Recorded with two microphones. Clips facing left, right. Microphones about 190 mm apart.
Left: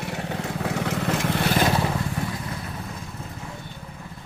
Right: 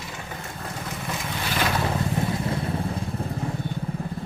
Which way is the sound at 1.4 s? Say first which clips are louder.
Left 4 dB; 40° left (ahead or behind).